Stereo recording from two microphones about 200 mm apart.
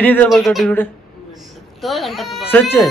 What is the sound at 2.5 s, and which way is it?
Speech, 10° left (ahead or behind).